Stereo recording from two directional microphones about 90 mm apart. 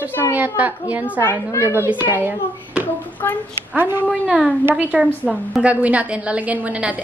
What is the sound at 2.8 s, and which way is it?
Speech, 20° left (ahead or behind).